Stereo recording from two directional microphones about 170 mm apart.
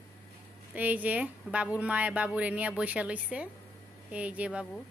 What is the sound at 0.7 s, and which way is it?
Speech, 10° right (ahead or behind).